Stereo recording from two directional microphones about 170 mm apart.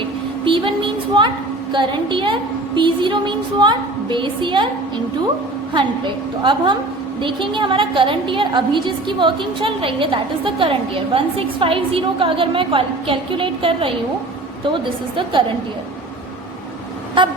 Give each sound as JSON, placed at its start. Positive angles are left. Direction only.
{"t": 0.4, "sound": "a woman's voice", "side_deg": -30}
{"t": 6.4, "sound": "a woman's voice", "side_deg": -30}
{"t": 17.2, "sound": "a woman's voice", "side_deg": -30}